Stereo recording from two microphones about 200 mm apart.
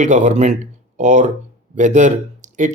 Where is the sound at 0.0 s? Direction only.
35° right (ahead or behind).